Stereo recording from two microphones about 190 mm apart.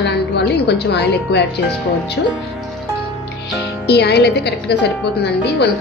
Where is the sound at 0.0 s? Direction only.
65° left (ahead or behind).